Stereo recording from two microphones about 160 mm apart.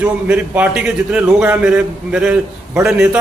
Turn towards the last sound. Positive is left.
turn(degrees=-5)  # may be behind; listen again after turning